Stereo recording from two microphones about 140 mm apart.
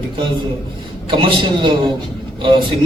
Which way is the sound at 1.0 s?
35° right (ahead or behind).